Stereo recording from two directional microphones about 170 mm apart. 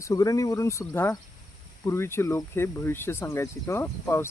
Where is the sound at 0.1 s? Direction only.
20° left (ahead or behind).